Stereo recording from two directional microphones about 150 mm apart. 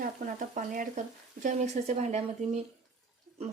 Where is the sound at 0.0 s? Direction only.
65° right (ahead or behind).